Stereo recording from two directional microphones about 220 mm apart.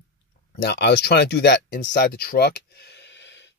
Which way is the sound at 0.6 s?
50° left (ahead or behind).